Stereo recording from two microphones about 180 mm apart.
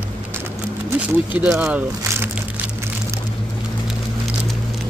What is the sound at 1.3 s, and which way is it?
Speech, 10° right (ahead or behind).